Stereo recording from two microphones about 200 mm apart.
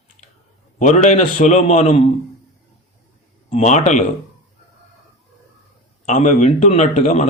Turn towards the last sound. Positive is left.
turn(degrees=35)  # may be behind; listen again after turning